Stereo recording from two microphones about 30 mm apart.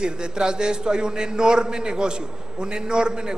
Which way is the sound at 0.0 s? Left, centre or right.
Right.